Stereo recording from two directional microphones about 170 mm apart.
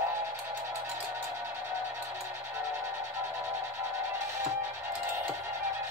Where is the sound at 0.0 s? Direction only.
15° right (ahead or behind).